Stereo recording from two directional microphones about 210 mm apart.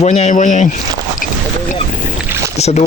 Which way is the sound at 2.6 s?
30° left (ahead or behind).